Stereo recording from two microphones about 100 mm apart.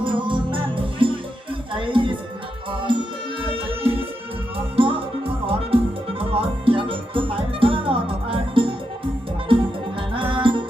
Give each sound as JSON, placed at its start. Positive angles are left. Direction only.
{"t": 0.0, "sound": "music", "side_deg": -55}
{"t": 10.2, "sound": "music", "side_deg": -55}